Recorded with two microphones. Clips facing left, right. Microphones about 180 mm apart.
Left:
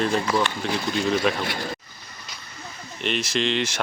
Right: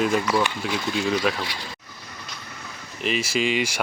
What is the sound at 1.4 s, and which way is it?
Speech, 50° left (ahead or behind).